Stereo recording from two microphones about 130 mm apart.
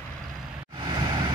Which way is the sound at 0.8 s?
35° right (ahead or behind).